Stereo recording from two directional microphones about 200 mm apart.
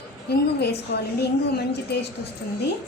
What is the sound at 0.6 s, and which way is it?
Speech, 55° left (ahead or behind).